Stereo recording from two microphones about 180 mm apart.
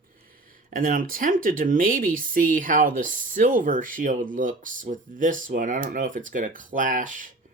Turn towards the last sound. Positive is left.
turn(degrees=-45)  # may be behind; listen again after turning